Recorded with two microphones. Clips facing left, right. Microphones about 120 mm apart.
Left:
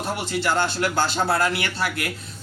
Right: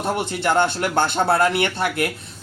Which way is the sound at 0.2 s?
55° right (ahead or behind).